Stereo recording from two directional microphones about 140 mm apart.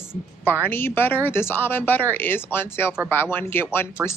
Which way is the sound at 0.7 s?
15° left (ahead or behind).